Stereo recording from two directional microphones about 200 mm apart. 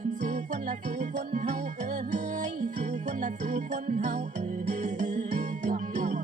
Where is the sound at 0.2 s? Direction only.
40° right (ahead or behind).